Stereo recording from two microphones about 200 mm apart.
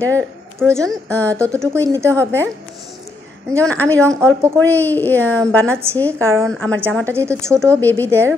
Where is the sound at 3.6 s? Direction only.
10° left (ahead or behind).